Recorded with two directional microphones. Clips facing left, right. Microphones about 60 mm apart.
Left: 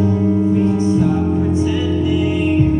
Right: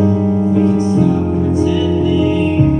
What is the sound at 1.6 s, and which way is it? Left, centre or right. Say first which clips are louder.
Music: right 4 dB; left.